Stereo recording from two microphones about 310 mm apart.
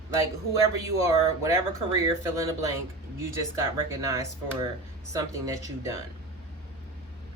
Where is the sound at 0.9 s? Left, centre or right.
Centre.